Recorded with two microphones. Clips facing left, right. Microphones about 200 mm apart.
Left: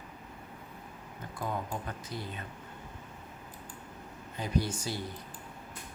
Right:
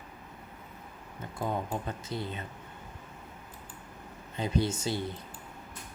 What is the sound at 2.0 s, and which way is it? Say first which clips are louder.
Speech: right 4 dB; 25° right (ahead or behind).